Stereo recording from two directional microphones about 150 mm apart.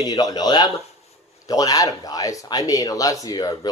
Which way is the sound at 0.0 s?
25° left (ahead or behind).